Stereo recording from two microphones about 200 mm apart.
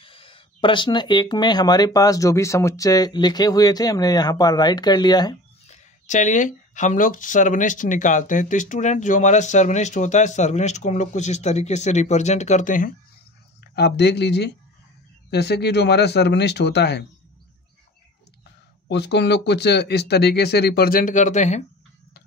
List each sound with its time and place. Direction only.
0.0 s speech: 25° left (ahead or behind)
5.7 s speech: 40° left (ahead or behind)
13.7 s speech: 55° left (ahead or behind)
18.9 s speech: 60° left (ahead or behind); by 21.6 s 35° left (ahead or behind)